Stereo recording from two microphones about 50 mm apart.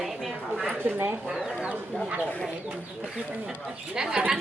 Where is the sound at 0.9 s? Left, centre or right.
Right.